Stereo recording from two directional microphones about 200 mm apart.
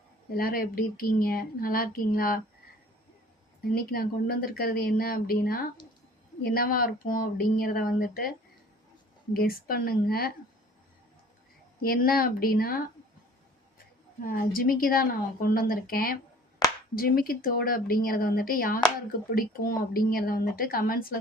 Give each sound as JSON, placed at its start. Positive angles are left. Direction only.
{"t": 0.3, "sound": "a woman's voice", "side_deg": 50}
{"t": 3.6, "sound": "a woman's voice", "side_deg": 50}
{"t": 9.3, "sound": "a woman's voice", "side_deg": 45}
{"t": 11.8, "sound": "a woman's voice", "side_deg": 50}
{"t": 14.2, "sound": "a woman's voice", "side_deg": 45}